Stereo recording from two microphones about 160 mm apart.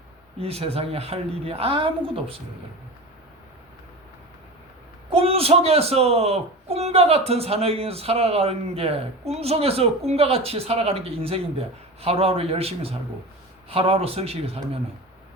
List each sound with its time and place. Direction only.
0.3 s a man's voice: 40° right (ahead or behind)
5.1 s a man's voice: 40° right (ahead or behind)